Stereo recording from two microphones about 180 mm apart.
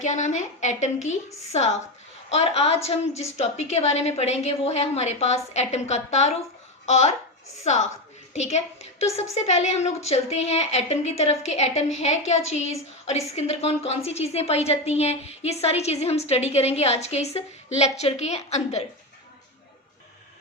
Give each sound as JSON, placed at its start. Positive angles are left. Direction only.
{"t": 0.0, "sound": "a woman's voice", "side_deg": 40}